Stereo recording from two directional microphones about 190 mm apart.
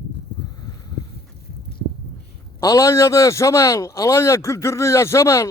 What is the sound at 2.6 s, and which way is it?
A man's voice, 20° left (ahead or behind).